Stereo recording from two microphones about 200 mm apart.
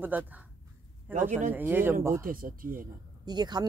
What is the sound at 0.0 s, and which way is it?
Speech, 10° right (ahead or behind).